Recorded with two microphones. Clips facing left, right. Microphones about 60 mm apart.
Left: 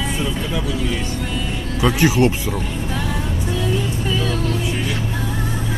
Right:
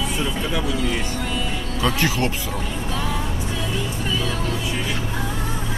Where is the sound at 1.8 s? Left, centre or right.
Centre.